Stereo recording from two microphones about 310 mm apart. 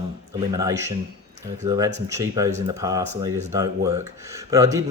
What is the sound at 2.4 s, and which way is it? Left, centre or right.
Speech, right.